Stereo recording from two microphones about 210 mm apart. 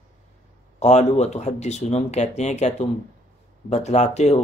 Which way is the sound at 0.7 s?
30° left (ahead or behind).